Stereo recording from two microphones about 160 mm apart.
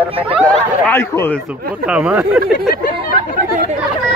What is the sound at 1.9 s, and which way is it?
Speech, 5° right (ahead or behind).